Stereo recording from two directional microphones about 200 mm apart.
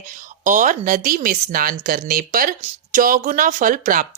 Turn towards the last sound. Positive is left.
turn(degrees=-45)  # may be behind; listen again after turning